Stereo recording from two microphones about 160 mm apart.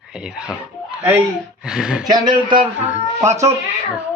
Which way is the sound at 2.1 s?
30° right (ahead or behind).